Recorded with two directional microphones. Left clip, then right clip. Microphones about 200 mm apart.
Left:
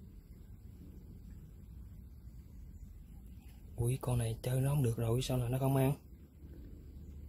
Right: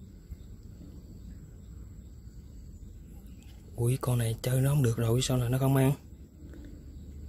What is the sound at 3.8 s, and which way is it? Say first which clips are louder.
Speech: right 6 dB; 10° right (ahead or behind).